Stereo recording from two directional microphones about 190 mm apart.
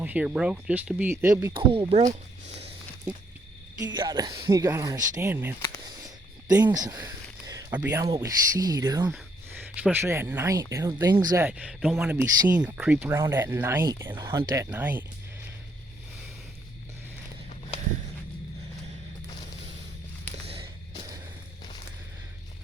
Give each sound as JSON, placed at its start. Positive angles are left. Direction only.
{"t": 0.0, "sound": "speech", "side_deg": -10}
{"t": 1.5, "sound": "speech", "side_deg": -30}
{"t": 3.8, "sound": "speech", "side_deg": -20}
{"t": 5.5, "sound": "speech", "side_deg": 15}
{"t": 6.7, "sound": "a sound", "side_deg": -20}
{"t": 7.7, "sound": "speech", "side_deg": -10}
{"t": 9.1, "sound": "speech", "side_deg": -5}
{"t": 11.4, "sound": "speech", "side_deg": -5}